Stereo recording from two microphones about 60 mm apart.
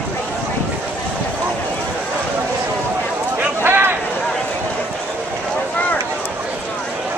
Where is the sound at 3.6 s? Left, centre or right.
Right.